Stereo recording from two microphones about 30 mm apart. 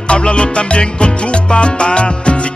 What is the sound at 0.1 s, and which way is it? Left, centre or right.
Music, left.